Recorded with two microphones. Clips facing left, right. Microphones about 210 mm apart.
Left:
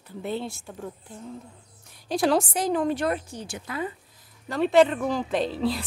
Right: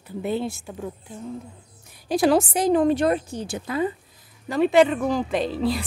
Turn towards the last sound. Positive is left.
turn(degrees=0)  # may be behind; listen again after turning